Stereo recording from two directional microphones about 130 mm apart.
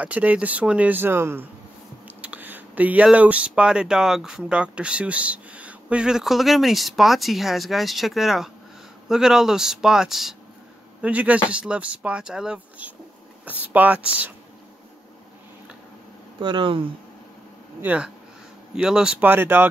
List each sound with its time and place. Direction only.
0.0 s speech: 10° right (ahead or behind)
16.3 s speech: 40° right (ahead or behind)
17.8 s speech: 10° right (ahead or behind)